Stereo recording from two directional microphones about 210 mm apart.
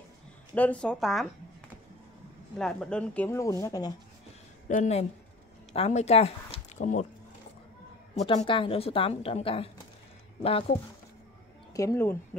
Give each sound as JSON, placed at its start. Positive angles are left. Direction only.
{"t": 0.6, "sound": "speech", "side_deg": 5}
{"t": 2.5, "sound": "speech", "side_deg": 5}
{"t": 4.6, "sound": "speech", "side_deg": 35}
{"t": 8.2, "sound": "a woman's voice", "side_deg": 25}
{"t": 11.7, "sound": "speech", "side_deg": 15}